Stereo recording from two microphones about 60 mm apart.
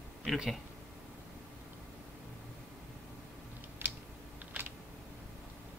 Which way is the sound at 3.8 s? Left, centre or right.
Right.